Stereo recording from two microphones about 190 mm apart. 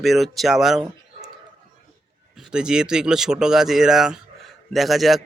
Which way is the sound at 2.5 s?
5° right (ahead or behind).